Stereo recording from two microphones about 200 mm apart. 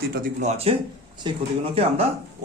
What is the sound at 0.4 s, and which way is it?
Speech, 30° right (ahead or behind).